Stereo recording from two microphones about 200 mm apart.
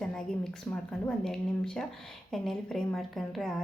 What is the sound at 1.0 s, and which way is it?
A woman's voice, 5° left (ahead or behind).